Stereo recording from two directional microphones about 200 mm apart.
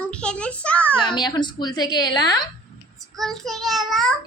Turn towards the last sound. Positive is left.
turn(degrees=0)  # may be behind; listen again after turning